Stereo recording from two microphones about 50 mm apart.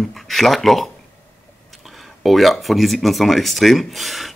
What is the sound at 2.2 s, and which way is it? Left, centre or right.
Speech, centre.